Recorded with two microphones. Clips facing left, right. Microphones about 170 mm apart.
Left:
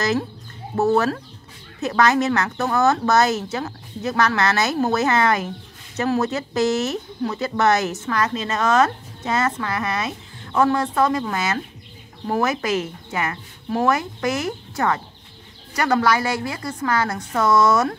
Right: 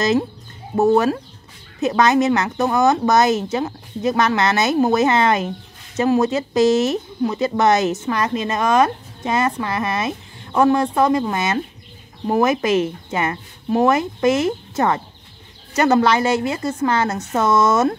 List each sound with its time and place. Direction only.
0.0 s speech: 20° right (ahead or behind)